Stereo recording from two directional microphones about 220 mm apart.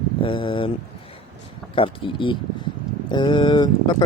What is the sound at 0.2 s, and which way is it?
Speech, 25° left (ahead or behind).